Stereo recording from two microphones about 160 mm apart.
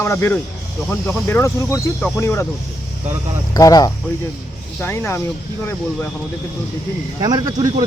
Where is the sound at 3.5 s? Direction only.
20° left (ahead or behind).